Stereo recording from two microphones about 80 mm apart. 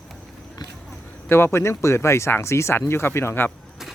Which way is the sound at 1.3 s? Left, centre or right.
Left.